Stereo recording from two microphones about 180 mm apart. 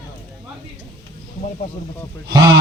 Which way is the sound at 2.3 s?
20° right (ahead or behind).